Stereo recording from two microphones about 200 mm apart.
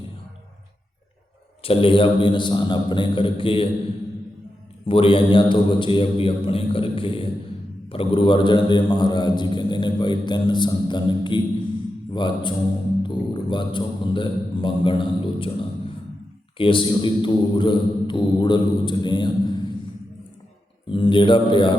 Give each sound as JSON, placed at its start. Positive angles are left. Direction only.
{"t": 1.6, "sound": "a man's voice", "side_deg": 25}
{"t": 4.9, "sound": "a man's voice", "side_deg": 25}
{"t": 16.6, "sound": "a man's voice", "side_deg": 25}
{"t": 20.9, "sound": "a man's voice", "side_deg": 25}